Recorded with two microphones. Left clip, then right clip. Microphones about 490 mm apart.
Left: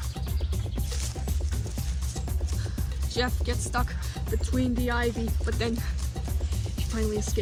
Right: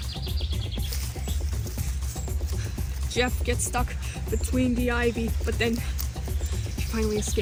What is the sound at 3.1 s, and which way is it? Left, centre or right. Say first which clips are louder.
Music: right 3 dB; left.